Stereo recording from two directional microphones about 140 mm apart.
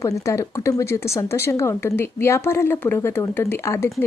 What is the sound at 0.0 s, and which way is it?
Speech, 20° left (ahead or behind).